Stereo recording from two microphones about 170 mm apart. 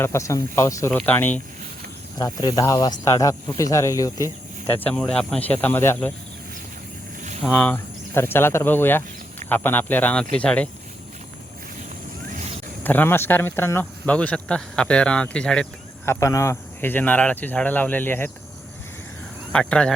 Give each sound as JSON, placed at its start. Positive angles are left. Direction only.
{"t": 0.0, "sound": "speech", "side_deg": 15}
{"t": 2.1, "sound": "speech", "side_deg": 25}
{"t": 4.9, "sound": "speech", "side_deg": 5}
{"t": 7.5, "sound": "speech", "side_deg": 10}
{"t": 12.8, "sound": "speech", "side_deg": 10}
{"t": 16.0, "sound": "speech", "side_deg": 15}
{"t": 19.5, "sound": "speech", "side_deg": 5}